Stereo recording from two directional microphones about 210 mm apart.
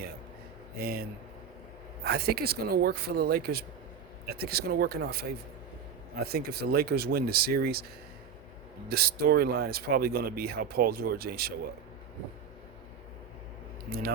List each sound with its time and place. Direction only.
0.8 s speech: 45° right (ahead or behind)
2.0 s speech: 50° right (ahead or behind)
8.9 s speech: 50° right (ahead or behind)